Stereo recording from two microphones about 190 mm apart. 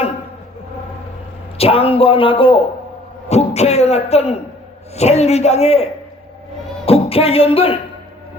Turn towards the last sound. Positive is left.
turn(degrees=30)  # may be behind; listen again after turning